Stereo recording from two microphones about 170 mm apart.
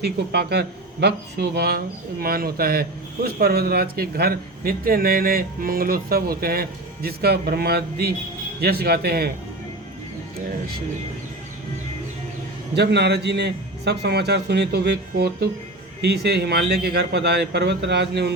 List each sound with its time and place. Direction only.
0.0 s speech: 70° right (ahead or behind)
12.7 s speech: 80° right